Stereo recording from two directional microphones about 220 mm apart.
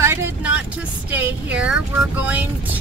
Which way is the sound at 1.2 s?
5° right (ahead or behind).